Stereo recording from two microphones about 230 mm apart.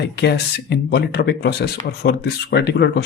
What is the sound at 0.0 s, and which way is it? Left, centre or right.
Speech, left.